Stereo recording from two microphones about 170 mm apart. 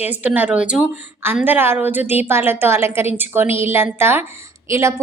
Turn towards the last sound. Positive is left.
turn(degrees=-15)  # may be behind; listen again after turning